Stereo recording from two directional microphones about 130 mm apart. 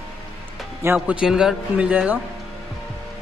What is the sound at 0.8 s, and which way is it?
A man's voice, 15° right (ahead or behind).